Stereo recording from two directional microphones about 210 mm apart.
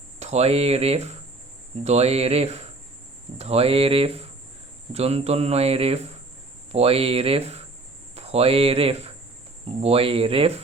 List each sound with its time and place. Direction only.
0.2 s speech: 30° right (ahead or behind)